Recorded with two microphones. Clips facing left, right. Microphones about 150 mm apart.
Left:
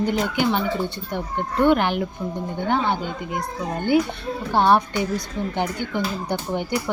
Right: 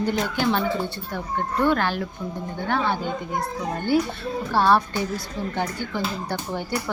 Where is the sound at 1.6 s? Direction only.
15° left (ahead or behind).